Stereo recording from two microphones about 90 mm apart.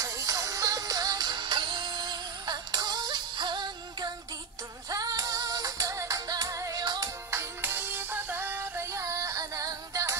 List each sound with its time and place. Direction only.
0.0 s music: 40° right (ahead or behind); by 4.1 s 55° right (ahead or behind)
4.8 s music: 45° right (ahead or behind)
7.2 s music: 30° right (ahead or behind)